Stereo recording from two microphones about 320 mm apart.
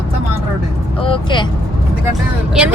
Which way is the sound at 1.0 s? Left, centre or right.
Centre.